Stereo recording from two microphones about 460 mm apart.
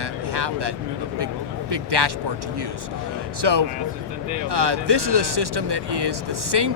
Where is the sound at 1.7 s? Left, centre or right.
Right.